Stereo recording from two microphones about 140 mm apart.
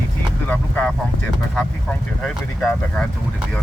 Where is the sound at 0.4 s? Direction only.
10° left (ahead or behind).